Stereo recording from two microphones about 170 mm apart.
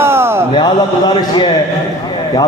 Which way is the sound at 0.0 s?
15° right (ahead or behind).